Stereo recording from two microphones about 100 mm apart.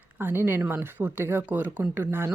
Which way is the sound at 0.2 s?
20° right (ahead or behind).